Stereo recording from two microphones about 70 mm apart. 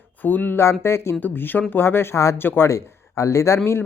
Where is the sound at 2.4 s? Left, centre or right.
Left.